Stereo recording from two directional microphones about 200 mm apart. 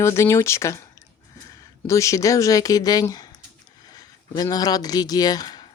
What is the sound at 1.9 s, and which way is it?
Speech, 15° left (ahead or behind).